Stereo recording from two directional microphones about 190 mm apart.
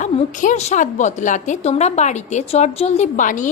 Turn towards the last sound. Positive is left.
turn(degrees=40)  # may be behind; listen again after turning